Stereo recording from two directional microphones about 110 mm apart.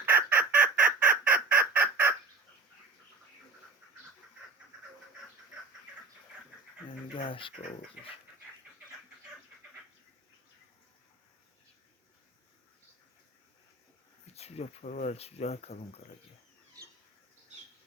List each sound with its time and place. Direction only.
0.0 s fowl: 20° right (ahead or behind)
7.1 s a sound: 55° left (ahead or behind)
14.3 s speech: 70° left (ahead or behind)